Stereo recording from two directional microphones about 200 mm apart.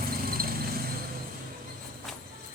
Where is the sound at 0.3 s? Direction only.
45° right (ahead or behind).